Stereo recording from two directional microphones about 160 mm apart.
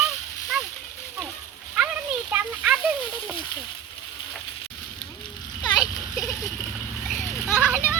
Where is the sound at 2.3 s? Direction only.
10° right (ahead or behind).